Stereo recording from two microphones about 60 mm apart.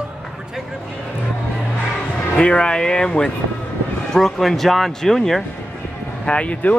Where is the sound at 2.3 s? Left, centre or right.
Centre.